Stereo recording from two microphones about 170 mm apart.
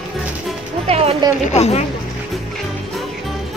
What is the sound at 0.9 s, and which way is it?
Music, 35° right (ahead or behind).